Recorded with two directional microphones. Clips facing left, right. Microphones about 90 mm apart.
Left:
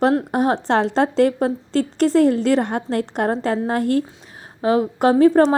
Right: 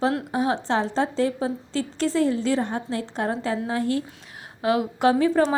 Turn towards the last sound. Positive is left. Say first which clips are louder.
# left 6 dB
turn(degrees=50)  # may be behind; listen again after turning